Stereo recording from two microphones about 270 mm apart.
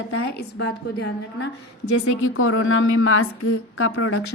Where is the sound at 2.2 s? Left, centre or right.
Left.